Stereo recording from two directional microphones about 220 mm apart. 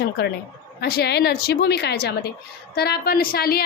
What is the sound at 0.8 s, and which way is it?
A woman's voice, 45° left (ahead or behind).